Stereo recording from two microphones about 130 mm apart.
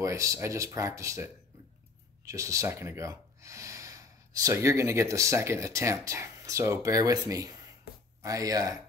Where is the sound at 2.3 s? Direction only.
25° right (ahead or behind).